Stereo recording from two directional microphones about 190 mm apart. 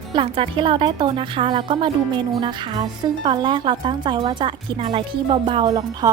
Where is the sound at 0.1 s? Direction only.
25° right (ahead or behind).